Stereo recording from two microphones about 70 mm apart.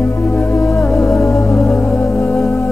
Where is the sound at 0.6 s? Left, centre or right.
Left.